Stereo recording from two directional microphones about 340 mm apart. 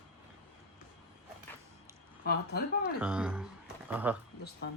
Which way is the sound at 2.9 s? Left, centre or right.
Centre.